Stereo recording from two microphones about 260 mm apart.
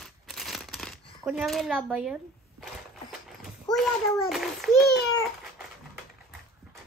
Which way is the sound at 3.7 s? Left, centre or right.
Centre.